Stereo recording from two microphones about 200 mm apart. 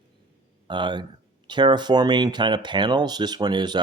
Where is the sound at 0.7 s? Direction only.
25° right (ahead or behind).